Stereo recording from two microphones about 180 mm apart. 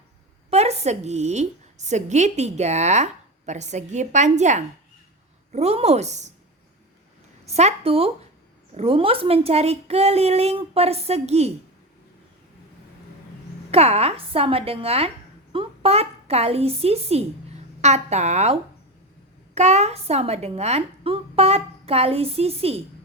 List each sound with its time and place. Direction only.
0.5 s a woman's voice: 35° right (ahead or behind)
7.4 s a woman's voice: 35° right (ahead or behind)
13.7 s a woman's voice: 35° right (ahead or behind)
19.5 s a woman's voice: 40° right (ahead or behind)